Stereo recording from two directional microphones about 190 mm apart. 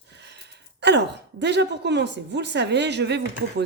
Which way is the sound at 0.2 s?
65° right (ahead or behind).